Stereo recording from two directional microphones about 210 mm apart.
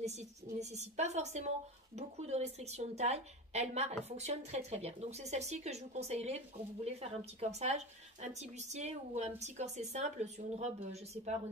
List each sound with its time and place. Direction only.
0.0 s a woman's voice: 30° right (ahead or behind)